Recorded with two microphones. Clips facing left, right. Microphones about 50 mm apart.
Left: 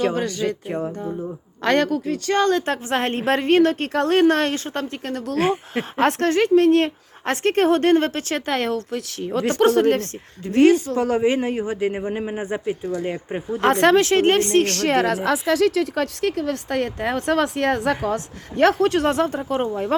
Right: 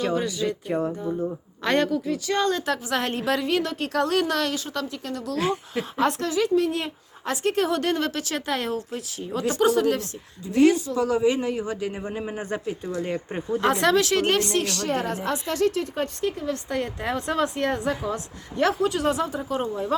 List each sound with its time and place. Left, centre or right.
0.2 s a woman's voice: left
0.7 s speech: centre
1.6 s a woman's voice: left
2.9 s a woman's voice: left
12.3 s speech: centre
12.8 s speech: centre
13.6 s a woman's voice: left
14.7 s a woman's voice: left